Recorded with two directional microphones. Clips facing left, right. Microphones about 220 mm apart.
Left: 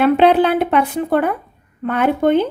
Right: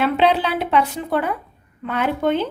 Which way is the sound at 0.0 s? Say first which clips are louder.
Left 6 dB; 55° left (ahead or behind).